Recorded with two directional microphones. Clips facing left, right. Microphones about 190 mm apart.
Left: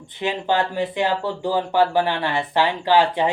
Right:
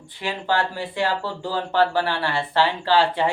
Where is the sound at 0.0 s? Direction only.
20° left (ahead or behind).